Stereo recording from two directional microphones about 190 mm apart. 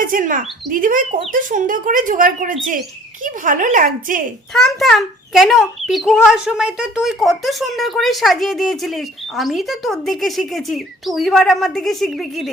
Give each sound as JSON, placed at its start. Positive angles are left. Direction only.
{"t": 0.0, "sound": "speech", "side_deg": -45}
{"t": 4.5, "sound": "a child's voice", "side_deg": 0}